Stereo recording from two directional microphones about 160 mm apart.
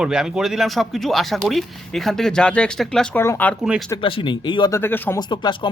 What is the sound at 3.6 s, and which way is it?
Speech, 5° right (ahead or behind).